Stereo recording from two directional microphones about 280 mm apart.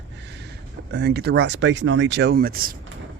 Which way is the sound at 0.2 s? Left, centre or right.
Right.